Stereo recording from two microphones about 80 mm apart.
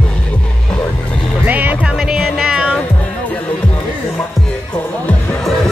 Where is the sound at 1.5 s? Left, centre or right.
Centre.